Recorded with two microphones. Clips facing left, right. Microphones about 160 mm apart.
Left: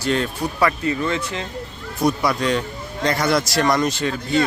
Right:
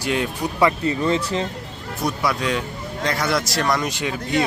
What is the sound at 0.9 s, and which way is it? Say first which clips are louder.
Speech: right 2 dB; 35° right (ahead or behind).